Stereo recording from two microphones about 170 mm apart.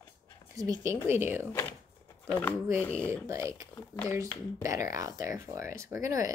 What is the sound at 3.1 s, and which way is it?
Speech, 15° right (ahead or behind).